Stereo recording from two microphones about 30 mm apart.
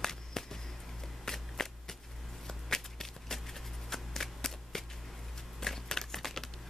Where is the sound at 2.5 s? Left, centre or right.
Centre.